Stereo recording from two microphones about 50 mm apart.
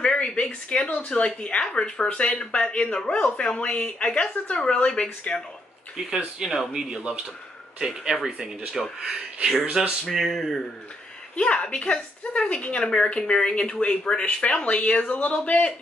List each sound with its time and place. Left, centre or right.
0.0 s a woman's voice: centre
5.9 s speech: centre
10.1 s speech: centre
11.3 s a woman's voice: left
15.1 s a woman's voice: left